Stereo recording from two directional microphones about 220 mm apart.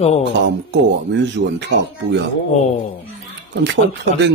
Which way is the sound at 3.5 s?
55° right (ahead or behind).